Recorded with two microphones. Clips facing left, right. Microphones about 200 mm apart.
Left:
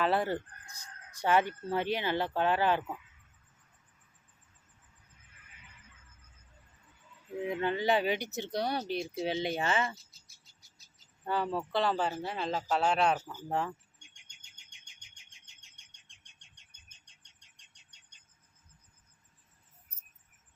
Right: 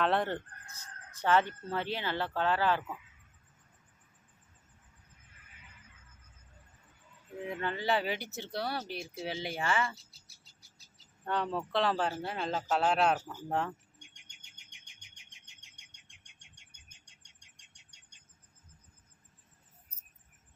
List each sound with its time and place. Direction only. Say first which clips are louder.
0.0 s speech: left 1 dB; 5° left (ahead or behind)
7.4 s speech: left 4 dB; 20° left (ahead or behind)
11.3 s a man's voice: left 1 dB; 5° left (ahead or behind)
14.1 s bird: right 3 dB; 20° right (ahead or behind)